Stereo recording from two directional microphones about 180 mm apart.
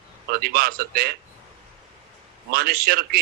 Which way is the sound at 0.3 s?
55° right (ahead or behind).